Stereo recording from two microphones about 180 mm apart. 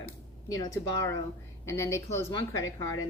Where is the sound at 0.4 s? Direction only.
20° left (ahead or behind).